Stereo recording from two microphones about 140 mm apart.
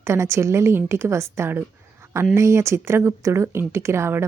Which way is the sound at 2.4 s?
20° right (ahead or behind).